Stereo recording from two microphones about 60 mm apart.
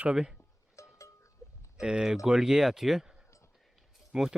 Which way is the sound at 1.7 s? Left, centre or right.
Centre.